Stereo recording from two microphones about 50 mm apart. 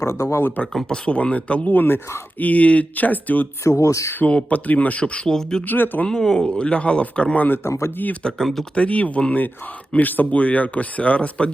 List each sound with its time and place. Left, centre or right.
0.0 s speech: left
0.9 s speech: left
1.7 s speech: left
2.4 s speech: left
3.6 s speech: left
4.3 s speech: left
5.3 s speech: centre
5.6 s speech: left
6.1 s speech: centre
7.6 s speech: left
8.2 s speech: centre
8.7 s speech: left